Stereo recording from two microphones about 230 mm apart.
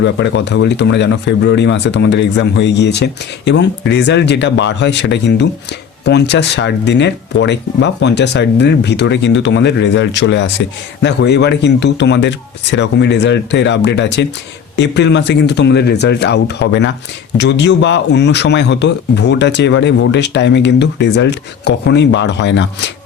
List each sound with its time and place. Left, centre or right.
0.0 s speech: left